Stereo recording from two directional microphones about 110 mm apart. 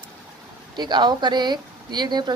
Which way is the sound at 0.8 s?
40° right (ahead or behind).